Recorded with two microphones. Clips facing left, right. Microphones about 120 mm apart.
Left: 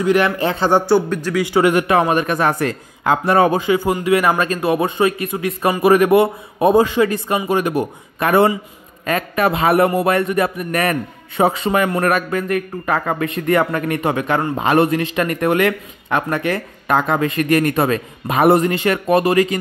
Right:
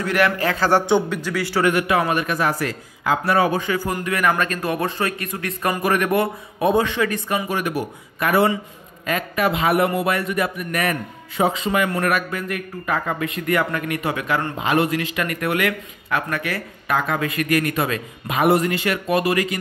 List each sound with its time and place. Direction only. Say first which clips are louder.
0.0 s a man's voice: left 4 dB; 20° left (ahead or behind)
1.7 s a man's voice: left 4 dB; 40° left (ahead or behind)
3.5 s a man's voice: left 6 dB; 25° left (ahead or behind)
9.0 s a man's voice: left 4 dB; 45° left (ahead or behind)
10.0 s a man's voice: left 5 dB; 45° left (ahead or behind)
10.4 s a man's voice: left 4 dB; 35° left (ahead or behind)
10.9 s a man's voice: left 4 dB; 55° left (ahead or behind)
12.0 s a man's voice: left 4 dB; 40° left (ahead or behind)
12.9 s speech: left 4 dB; 60° left (ahead or behind)
13.2 s a man's voice: left 5 dB; 30° left (ahead or behind)